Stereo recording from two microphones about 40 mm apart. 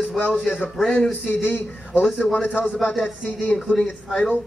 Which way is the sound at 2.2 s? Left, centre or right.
Left.